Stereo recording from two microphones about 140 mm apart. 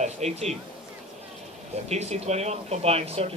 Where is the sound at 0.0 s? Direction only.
55° right (ahead or behind).